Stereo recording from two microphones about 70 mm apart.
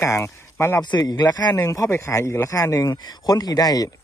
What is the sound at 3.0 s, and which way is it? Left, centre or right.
Speech, left.